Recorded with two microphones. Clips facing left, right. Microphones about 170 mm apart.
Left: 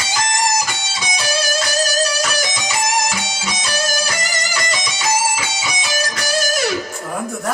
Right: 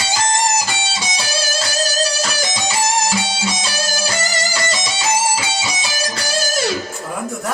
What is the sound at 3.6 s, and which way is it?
Music, 30° right (ahead or behind).